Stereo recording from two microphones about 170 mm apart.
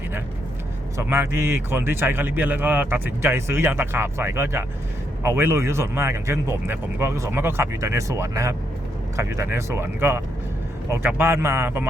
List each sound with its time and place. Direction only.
0.9 s a man's voice: 15° right (ahead or behind)